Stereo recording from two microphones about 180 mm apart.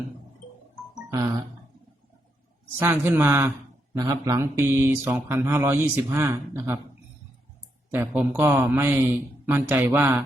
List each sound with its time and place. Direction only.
1.1 s speech: 20° right (ahead or behind)
2.7 s speech: 15° right (ahead or behind)
7.9 s speech: 10° right (ahead or behind)